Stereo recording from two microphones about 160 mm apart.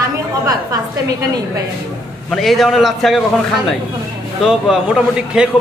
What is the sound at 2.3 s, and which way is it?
Speech, centre (ahead or behind).